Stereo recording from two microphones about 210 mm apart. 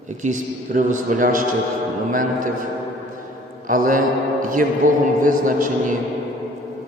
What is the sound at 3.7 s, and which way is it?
A man's voice, 40° right (ahead or behind).